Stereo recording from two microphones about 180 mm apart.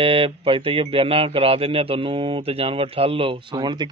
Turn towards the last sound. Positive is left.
turn(degrees=-25)  # may be behind; listen again after turning